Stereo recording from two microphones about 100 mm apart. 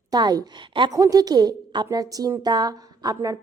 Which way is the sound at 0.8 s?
35° right (ahead or behind).